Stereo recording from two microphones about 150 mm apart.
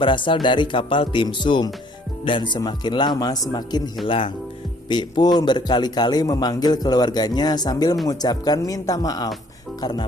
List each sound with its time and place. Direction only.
0.0 s a man's voice: 35° left (ahead or behind)